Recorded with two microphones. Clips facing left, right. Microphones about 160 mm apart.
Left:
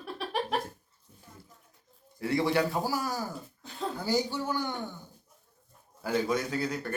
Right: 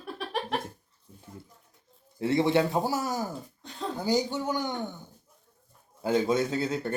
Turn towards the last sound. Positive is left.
turn(degrees=-25)  # may be behind; listen again after turning